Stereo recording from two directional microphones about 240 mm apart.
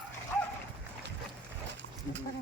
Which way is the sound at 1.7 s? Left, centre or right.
Right.